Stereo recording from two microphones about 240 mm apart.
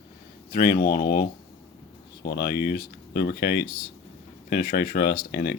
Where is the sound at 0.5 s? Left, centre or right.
Left.